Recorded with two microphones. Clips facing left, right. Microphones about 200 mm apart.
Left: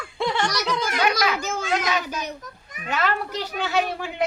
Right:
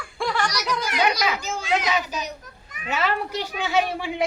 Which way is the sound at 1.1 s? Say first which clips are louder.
Left 1 dB; 50° left (ahead or behind).